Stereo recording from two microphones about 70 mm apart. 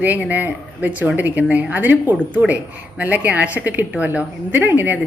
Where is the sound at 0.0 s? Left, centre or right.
Right.